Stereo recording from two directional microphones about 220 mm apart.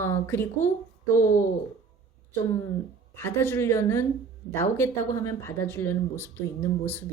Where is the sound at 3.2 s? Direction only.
10° left (ahead or behind).